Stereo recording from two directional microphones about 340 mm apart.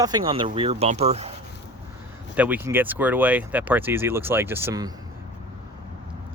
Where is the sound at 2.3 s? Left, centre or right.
Centre.